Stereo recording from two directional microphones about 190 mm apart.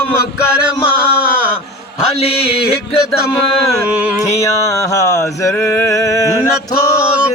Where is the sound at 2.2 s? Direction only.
30° left (ahead or behind).